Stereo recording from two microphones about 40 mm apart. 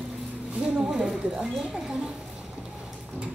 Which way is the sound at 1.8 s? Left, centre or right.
Right.